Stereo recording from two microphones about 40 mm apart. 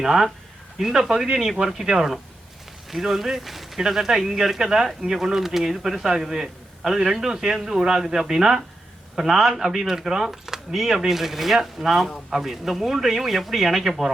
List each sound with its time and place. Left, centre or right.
0.0 s speech: centre
8.2 s speech: centre